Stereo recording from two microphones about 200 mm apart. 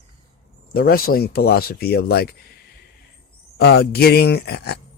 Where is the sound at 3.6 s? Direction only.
55° left (ahead or behind).